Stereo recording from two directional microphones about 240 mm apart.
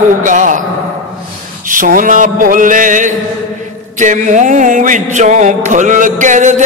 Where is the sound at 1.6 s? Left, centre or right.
Right.